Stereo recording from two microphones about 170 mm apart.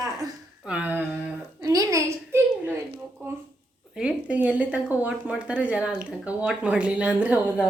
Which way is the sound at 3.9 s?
5° right (ahead or behind).